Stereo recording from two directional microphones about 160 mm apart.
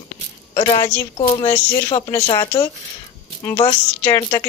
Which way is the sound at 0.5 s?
25° left (ahead or behind).